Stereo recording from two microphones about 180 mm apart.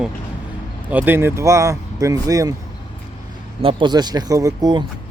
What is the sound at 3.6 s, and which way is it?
Speech, 25° right (ahead or behind).